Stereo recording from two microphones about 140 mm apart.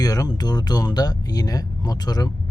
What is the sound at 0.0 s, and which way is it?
Speech, 25° left (ahead or behind).